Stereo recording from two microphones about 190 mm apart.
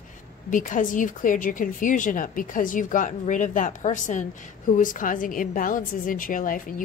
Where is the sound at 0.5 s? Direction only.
45° left (ahead or behind).